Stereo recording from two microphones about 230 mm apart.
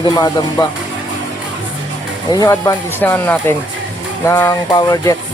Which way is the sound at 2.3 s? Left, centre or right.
Centre.